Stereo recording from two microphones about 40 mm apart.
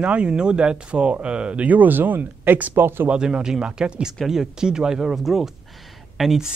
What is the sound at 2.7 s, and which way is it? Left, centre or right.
Speech, right.